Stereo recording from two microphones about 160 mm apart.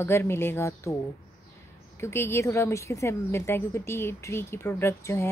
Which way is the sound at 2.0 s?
15° left (ahead or behind).